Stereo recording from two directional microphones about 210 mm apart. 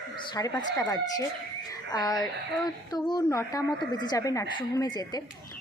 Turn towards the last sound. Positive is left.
turn(degrees=20)  # may be behind; listen again after turning